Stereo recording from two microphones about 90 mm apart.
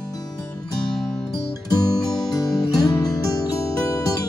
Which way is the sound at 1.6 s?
45° left (ahead or behind).